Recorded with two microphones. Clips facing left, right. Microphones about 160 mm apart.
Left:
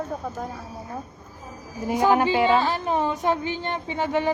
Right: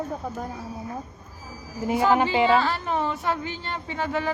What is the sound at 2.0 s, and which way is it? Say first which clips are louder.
A woman's voice: left 1 dB; 15° left (ahead or behind).